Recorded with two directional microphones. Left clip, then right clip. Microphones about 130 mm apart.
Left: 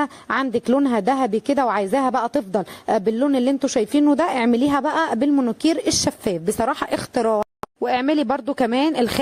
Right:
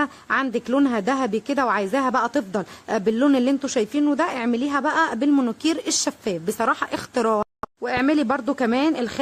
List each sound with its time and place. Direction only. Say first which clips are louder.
0.0 s speech: even; 35° left (ahead or behind)
4.2 s speech: left 4 dB; 40° left (ahead or behind)
7.8 s speech: left 2 dB; 55° left (ahead or behind)